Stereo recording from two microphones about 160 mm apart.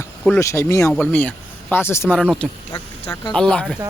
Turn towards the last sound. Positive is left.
turn(degrees=5)  # may be behind; listen again after turning